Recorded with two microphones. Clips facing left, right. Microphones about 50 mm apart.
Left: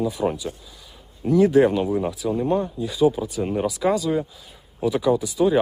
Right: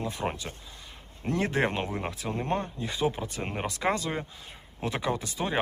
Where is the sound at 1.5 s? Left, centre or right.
Right.